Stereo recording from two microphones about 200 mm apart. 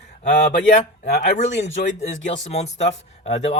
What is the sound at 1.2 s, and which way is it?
Speech, 35° left (ahead or behind).